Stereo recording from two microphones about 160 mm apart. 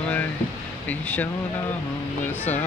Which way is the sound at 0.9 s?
10° left (ahead or behind).